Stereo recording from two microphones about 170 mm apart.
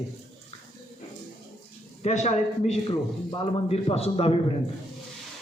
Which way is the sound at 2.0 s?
40° left (ahead or behind).